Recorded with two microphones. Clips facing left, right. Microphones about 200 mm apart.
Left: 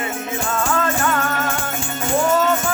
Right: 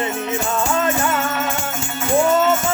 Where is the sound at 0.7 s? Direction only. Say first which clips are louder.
Even; 20° right (ahead or behind).